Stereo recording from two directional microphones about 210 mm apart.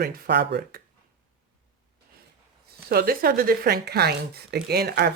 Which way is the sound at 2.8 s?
45° right (ahead or behind).